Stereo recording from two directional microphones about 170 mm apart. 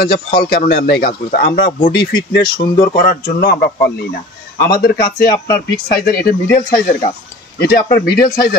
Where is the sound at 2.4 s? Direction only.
25° left (ahead or behind).